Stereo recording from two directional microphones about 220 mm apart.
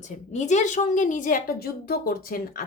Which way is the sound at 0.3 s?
30° left (ahead or behind).